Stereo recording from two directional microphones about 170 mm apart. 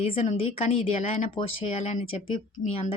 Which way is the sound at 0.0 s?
35° left (ahead or behind).